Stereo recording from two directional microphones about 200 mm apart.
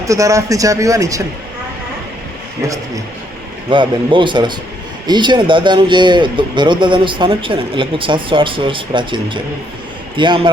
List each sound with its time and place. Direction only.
0.0 s a man's voice: 15° right (ahead or behind)
2.6 s a man's voice: 15° right (ahead or behind)